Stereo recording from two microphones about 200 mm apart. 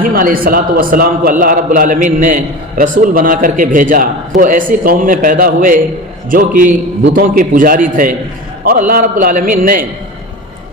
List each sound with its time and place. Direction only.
0.0 s a man's voice: 45° right (ahead or behind)